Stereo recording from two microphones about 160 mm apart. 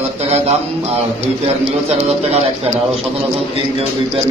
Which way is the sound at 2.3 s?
40° right (ahead or behind).